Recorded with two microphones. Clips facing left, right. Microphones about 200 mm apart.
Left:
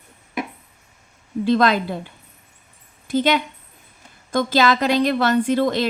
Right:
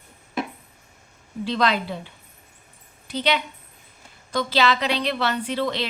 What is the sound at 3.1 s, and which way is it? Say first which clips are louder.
Speech: left 6 dB; 50° left (ahead or behind).